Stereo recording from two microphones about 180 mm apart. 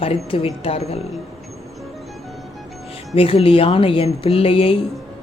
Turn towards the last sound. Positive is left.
turn(degrees=30)  # may be behind; listen again after turning